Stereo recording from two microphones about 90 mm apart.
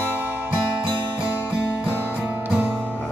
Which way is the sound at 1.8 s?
15° right (ahead or behind).